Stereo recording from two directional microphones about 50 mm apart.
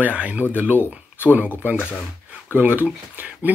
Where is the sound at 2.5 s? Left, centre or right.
Right.